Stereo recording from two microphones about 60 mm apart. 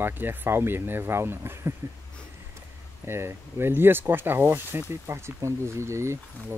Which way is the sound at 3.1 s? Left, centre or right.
Right.